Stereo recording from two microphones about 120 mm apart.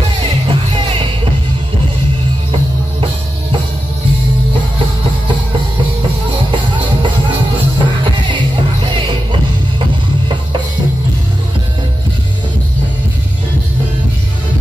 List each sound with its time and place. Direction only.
0.5 s music: 50° right (ahead or behind)
7.8 s music: 40° right (ahead or behind)